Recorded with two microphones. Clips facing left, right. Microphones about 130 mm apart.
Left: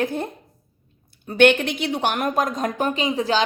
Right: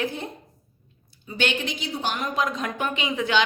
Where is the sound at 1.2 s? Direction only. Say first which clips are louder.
Left 11 dB; 60° left (ahead or behind).